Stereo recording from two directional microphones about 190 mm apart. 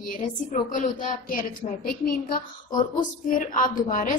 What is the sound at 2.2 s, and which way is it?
A woman's voice, 50° left (ahead or behind).